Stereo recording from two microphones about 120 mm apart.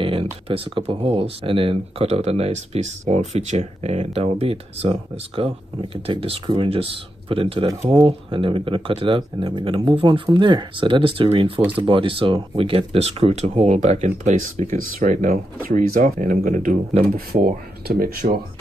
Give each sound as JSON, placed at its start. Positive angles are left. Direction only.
{"t": 0.0, "sound": "speech", "side_deg": -50}
{"t": 8.0, "sound": "speech", "side_deg": -45}
{"t": 18.2, "sound": "speech", "side_deg": -90}